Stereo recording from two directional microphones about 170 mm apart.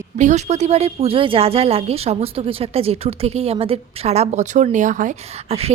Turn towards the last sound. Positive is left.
turn(degrees=-35)  # may be behind; listen again after turning